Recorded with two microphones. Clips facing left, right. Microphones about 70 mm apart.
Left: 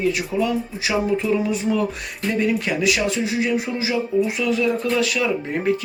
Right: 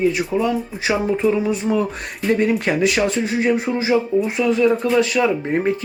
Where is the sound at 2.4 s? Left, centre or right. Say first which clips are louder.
Even; right.